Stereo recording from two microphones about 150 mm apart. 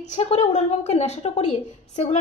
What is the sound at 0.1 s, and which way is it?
A woman's voice, 50° left (ahead or behind).